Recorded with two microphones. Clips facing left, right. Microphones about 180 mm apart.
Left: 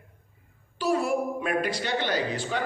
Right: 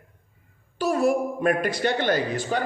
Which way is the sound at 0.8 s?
45° right (ahead or behind).